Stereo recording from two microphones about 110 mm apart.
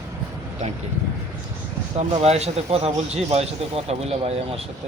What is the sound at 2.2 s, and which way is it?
Speech, 70° right (ahead or behind).